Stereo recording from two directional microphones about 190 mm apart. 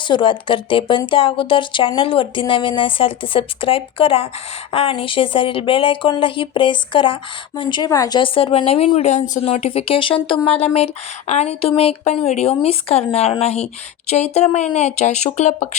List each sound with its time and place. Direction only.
0.1 s speech: 25° left (ahead or behind)